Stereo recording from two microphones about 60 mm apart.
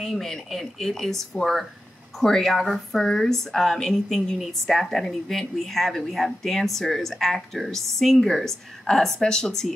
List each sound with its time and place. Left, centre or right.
0.0 s a woman's voice: centre